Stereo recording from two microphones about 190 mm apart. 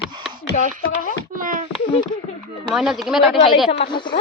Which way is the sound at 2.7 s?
5° right (ahead or behind).